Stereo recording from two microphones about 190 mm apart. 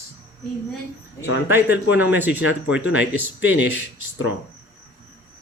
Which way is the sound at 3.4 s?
65° left (ahead or behind).